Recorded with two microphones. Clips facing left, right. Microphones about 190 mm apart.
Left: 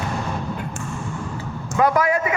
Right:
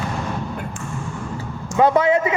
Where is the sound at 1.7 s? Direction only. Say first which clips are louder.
Right 3 dB; 25° right (ahead or behind).